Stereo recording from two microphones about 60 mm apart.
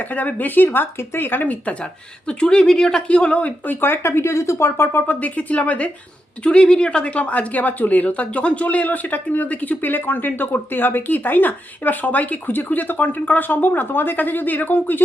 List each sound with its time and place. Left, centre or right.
0.0 s speech: left
1.8 s speech: centre
3.8 s speech: left
5.0 s speech: left